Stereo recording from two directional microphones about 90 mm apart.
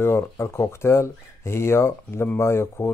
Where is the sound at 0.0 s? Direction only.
30° left (ahead or behind).